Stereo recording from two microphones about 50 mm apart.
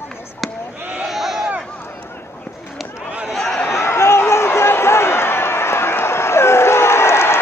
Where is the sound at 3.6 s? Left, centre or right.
Left.